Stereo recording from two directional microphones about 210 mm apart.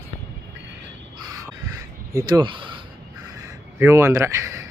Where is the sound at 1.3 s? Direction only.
15° right (ahead or behind).